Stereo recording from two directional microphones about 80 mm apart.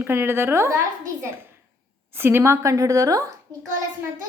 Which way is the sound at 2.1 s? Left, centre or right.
Right.